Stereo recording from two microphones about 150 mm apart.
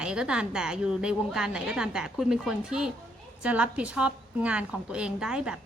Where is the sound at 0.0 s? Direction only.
5° right (ahead or behind).